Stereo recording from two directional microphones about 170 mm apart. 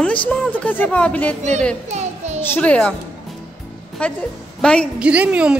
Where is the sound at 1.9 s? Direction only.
40° right (ahead or behind).